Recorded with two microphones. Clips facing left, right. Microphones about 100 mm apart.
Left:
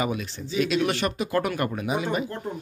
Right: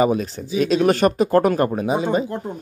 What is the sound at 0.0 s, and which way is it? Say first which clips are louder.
Speech: right 9 dB; 35° right (ahead or behind).